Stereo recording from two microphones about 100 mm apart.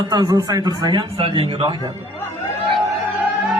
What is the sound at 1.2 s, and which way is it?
Speech, 65° right (ahead or behind).